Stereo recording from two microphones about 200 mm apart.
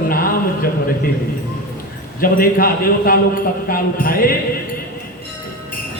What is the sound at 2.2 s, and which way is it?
A man's voice, 45° left (ahead or behind).